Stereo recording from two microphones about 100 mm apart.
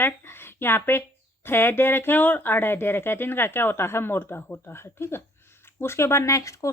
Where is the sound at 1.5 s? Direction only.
20° left (ahead or behind).